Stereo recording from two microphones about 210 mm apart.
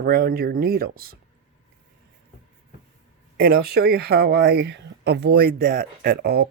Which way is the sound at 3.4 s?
45° right (ahead or behind).